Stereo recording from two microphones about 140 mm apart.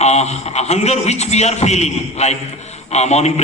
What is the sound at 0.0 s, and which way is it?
A man's voice, 50° left (ahead or behind).